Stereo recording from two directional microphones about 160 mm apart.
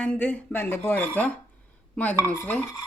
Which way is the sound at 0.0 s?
5° left (ahead or behind).